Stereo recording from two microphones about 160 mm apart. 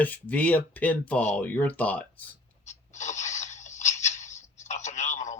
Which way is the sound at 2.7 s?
45° left (ahead or behind).